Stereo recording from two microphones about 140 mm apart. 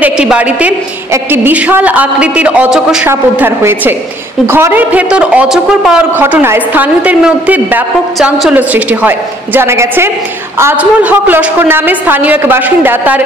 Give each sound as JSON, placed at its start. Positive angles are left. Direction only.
{"t": 0.0, "sound": "a woman's voice", "side_deg": -10}
{"t": 3.1, "sound": "a woman's voice", "side_deg": -15}